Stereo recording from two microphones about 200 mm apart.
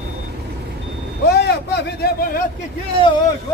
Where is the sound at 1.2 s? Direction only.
55° left (ahead or behind).